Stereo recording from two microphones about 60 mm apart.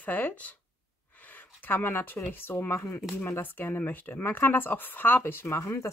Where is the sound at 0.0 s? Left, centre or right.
Left.